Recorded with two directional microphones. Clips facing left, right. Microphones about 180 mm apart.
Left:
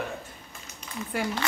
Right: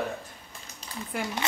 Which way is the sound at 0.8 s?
35° right (ahead or behind).